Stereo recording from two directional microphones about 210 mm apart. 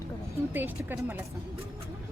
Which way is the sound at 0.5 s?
10° right (ahead or behind).